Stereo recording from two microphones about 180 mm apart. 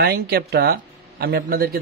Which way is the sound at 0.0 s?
65° right (ahead or behind).